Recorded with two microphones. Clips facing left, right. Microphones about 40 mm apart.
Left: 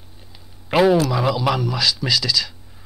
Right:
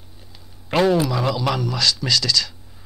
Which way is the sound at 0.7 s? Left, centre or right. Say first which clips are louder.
Left 2 dB; centre.